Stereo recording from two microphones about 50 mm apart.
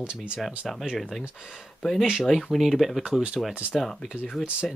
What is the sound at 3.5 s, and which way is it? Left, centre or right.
Speech, right.